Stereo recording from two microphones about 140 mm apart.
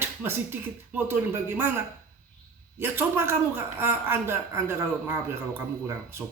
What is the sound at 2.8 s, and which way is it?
Speech, 15° right (ahead or behind).